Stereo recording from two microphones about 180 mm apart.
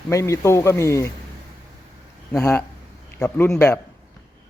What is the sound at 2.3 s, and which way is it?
A man's voice, 10° left (ahead or behind).